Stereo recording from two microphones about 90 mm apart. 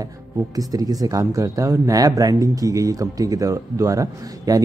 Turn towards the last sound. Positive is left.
turn(degrees=-40)  # may be behind; listen again after turning